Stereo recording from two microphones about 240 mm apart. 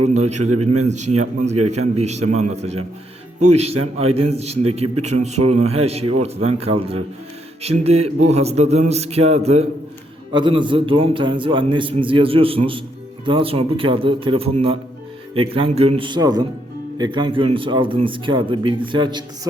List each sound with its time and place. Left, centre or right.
0.1 s a man's voice: right
0.5 s a man's voice: right
2.0 s a man's voice: right